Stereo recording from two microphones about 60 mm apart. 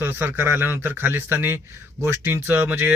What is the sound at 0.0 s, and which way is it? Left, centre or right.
A man's voice, right.